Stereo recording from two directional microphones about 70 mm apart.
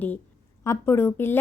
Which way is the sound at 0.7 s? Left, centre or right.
Left.